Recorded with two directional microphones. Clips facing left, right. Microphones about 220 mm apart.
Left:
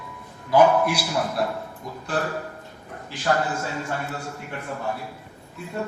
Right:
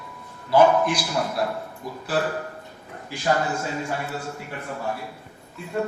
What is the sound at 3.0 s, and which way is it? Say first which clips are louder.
Speech: right 1 dB; 10° right (ahead or behind).